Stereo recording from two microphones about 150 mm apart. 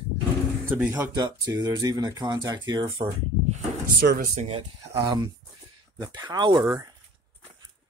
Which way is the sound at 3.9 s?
65° right (ahead or behind).